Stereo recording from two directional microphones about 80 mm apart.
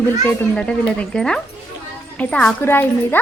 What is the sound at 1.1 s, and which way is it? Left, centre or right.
Speech, centre.